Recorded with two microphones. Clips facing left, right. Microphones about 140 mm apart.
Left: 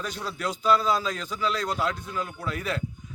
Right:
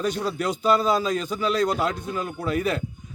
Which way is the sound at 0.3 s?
20° right (ahead or behind).